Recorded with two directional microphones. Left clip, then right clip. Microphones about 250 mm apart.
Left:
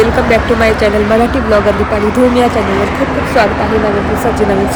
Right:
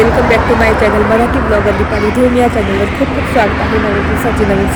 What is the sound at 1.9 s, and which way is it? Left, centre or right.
Speech, centre.